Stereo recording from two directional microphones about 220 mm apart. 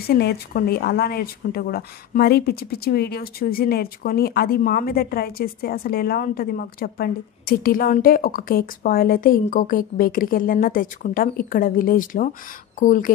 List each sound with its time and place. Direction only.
0.1 s speech: 45° left (ahead or behind)